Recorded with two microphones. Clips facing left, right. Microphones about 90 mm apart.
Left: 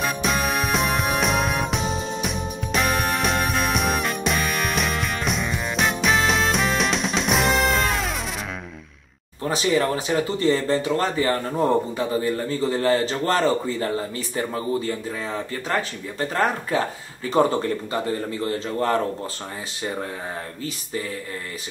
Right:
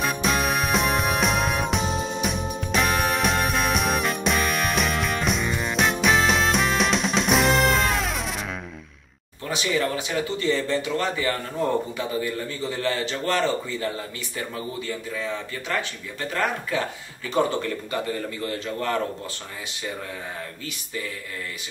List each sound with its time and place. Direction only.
0.0 s music: centre (ahead or behind)
9.4 s speech: 35° left (ahead or behind)